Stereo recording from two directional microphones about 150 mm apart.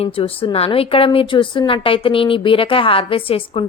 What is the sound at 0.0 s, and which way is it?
A woman's voice, 40° left (ahead or behind).